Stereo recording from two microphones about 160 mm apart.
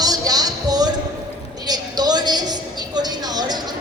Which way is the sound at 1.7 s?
25° right (ahead or behind).